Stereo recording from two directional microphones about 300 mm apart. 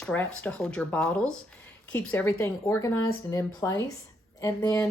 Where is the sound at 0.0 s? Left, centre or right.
Centre.